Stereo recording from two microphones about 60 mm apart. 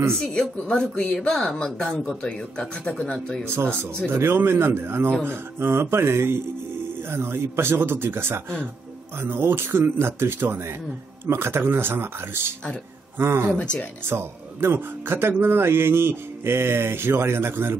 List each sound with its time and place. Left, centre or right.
0.2 s speech: centre
3.0 s speech: centre
3.6 s speech: centre
4.1 s speech: right
13.6 s speech: centre
14.0 s speech: right